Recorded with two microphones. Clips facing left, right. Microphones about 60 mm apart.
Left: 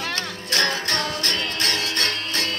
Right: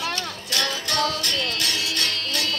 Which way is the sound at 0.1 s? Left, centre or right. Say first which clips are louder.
Left 2 dB; left.